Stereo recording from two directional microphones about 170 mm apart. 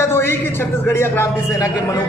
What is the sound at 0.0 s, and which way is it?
A man's voice, 15° left (ahead or behind).